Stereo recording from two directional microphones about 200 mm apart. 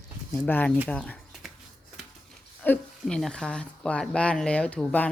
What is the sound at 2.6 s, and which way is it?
Rub, 5° left (ahead or behind).